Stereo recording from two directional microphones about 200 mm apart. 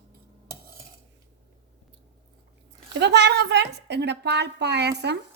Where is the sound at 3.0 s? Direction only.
55° right (ahead or behind).